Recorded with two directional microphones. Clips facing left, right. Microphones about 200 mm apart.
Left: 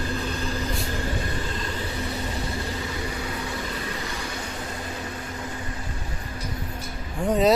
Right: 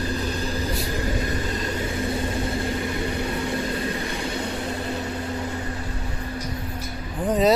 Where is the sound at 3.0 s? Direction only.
25° right (ahead or behind).